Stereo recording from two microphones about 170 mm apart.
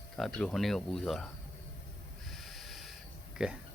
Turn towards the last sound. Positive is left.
turn(degrees=-5)  # may be behind; listen again after turning